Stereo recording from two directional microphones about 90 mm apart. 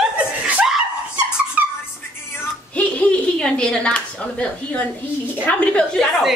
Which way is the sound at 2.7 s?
15° left (ahead or behind).